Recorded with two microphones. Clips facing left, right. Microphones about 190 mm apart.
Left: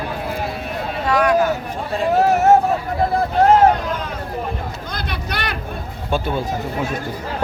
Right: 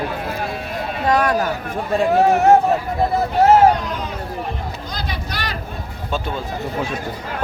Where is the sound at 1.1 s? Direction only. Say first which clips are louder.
Left 1 dB; 40° right (ahead or behind).